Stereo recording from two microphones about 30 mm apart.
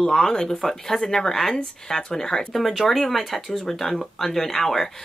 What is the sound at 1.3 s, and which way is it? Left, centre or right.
A woman's voice, centre.